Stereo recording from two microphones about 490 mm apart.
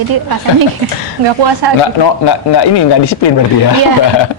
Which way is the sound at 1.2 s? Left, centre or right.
Right.